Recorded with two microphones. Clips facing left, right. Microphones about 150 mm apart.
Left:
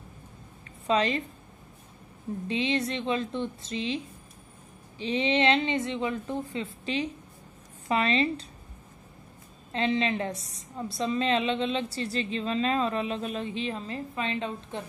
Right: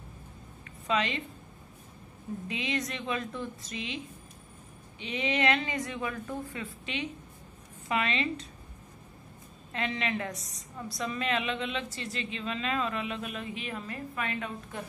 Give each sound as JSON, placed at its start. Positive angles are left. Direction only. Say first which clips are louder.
{"t": 0.8, "sound": "a woman's voice", "louder": "left 5 dB", "side_deg": 35}
{"t": 2.4, "sound": "a woman's voice", "louder": "left 6 dB", "side_deg": 30}
{"t": 9.7, "sound": "a woman's voice", "louder": "left 6 dB", "side_deg": 30}